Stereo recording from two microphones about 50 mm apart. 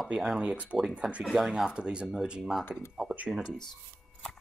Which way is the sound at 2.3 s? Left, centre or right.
Centre.